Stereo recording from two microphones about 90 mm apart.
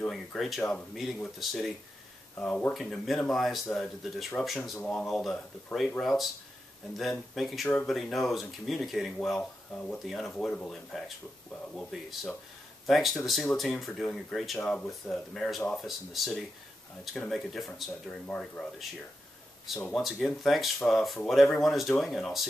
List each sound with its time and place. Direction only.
0.0 s speech: 5° left (ahead or behind)
0.6 s speech: 15° left (ahead or behind)
0.9 s speech: centre (ahead or behind)
2.3 s speech: 15° left (ahead or behind)
2.7 s speech: centre (ahead or behind)
9.4 s speech: 15° left (ahead or behind)
10.0 s speech: 5° left (ahead or behind)
14.6 s speech: 15° left (ahead or behind)
20.0 s speech: centre (ahead or behind)